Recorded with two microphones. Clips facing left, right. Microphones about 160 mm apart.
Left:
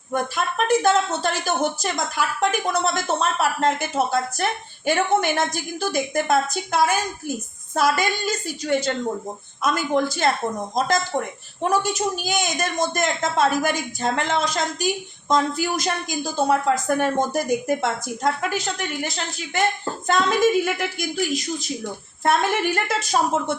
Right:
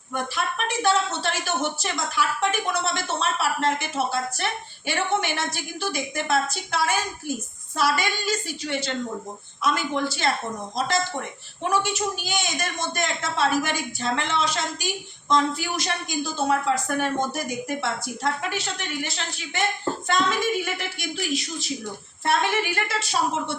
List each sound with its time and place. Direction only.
0.1 s a woman's voice: 45° left (ahead or behind)
11.7 s a woman's voice: 40° left (ahead or behind)